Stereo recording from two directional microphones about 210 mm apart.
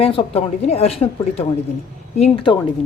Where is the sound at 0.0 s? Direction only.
25° left (ahead or behind).